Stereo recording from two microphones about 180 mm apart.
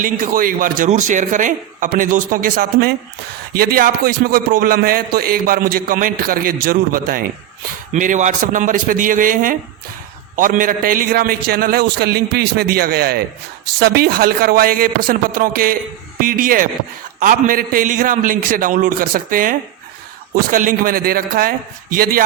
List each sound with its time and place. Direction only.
0.0 s a man's voice: 50° right (ahead or behind)